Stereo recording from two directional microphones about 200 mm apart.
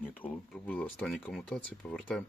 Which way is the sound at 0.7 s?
10° left (ahead or behind).